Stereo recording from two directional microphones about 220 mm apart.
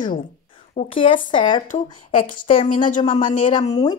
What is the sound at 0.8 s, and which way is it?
Speech, 25° left (ahead or behind).